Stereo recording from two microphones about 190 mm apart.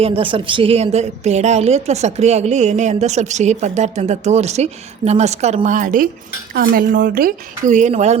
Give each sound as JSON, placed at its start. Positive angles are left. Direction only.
{"t": 0.0, "sound": "a woman's voice", "side_deg": -30}